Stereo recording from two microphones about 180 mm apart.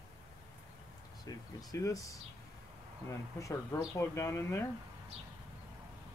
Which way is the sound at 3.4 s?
15° left (ahead or behind).